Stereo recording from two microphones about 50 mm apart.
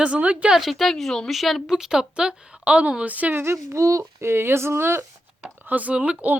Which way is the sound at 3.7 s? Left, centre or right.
Right.